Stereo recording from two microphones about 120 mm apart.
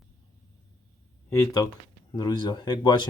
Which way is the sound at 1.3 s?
30° left (ahead or behind).